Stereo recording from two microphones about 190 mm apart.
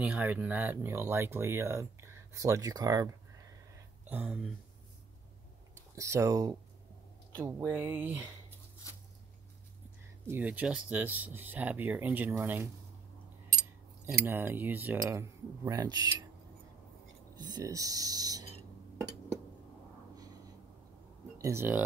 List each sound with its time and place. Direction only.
0.0 s speech: 10° right (ahead or behind)
4.1 s speech: 5° right (ahead or behind)
5.9 s speech: 15° right (ahead or behind)
10.2 s speech: 10° right (ahead or behind)
14.2 s speech: 10° right (ahead or behind)
17.4 s speech: 20° right (ahead or behind)
21.4 s speech: 15° right (ahead or behind)